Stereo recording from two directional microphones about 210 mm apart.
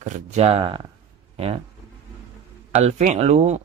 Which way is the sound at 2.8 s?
35° right (ahead or behind).